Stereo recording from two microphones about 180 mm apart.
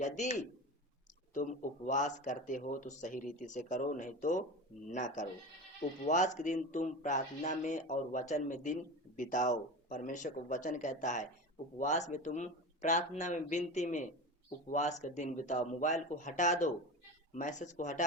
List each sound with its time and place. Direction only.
0.0 s speech: 40° left (ahead or behind)